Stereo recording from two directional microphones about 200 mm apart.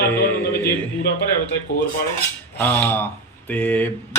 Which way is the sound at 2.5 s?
10° left (ahead or behind).